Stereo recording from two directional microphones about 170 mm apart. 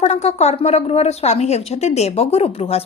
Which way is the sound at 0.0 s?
40° left (ahead or behind).